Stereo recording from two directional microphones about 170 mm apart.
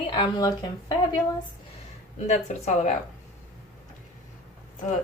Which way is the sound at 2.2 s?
40° left (ahead or behind).